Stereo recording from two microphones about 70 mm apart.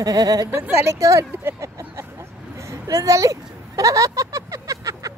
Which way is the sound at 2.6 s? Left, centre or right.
Right.